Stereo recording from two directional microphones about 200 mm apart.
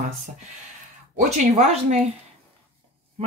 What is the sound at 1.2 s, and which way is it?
Speech, 35° right (ahead or behind).